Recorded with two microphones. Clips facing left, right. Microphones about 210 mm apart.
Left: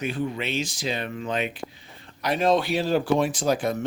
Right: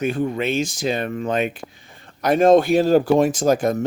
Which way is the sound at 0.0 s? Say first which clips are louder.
Right 6 dB; 50° right (ahead or behind).